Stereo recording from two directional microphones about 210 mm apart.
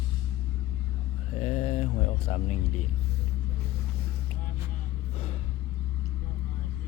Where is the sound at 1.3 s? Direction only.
30° left (ahead or behind).